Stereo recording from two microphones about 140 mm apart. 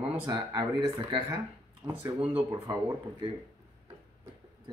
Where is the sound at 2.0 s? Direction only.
45° right (ahead or behind).